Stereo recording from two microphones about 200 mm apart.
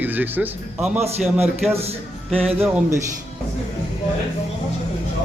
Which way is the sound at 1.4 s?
30° right (ahead or behind).